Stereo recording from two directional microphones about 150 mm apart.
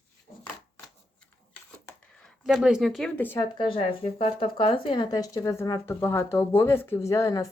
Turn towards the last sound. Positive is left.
turn(degrees=20)  # may be behind; listen again after turning